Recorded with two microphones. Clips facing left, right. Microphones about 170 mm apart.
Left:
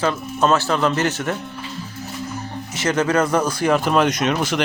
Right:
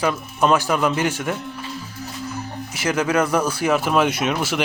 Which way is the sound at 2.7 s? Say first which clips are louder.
Left 1 dB; 10° right (ahead or behind).